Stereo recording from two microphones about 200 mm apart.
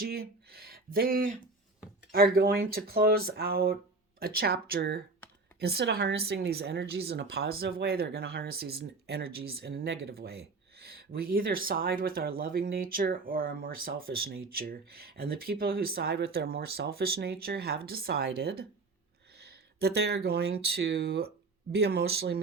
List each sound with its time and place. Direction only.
0.0 s speech: 50° right (ahead or behind)